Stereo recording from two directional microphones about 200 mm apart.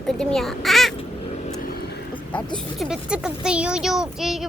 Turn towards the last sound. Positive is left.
turn(degrees=0)  # may be behind; listen again after turning